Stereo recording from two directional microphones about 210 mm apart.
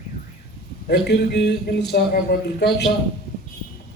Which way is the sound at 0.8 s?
50° left (ahead or behind).